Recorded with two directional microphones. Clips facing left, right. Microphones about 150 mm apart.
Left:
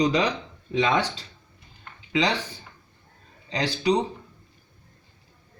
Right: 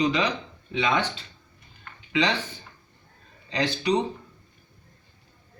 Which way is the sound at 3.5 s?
35° left (ahead or behind).